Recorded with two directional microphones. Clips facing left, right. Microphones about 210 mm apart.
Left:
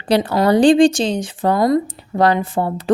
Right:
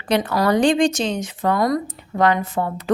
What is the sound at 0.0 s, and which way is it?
Speech, 30° left (ahead or behind).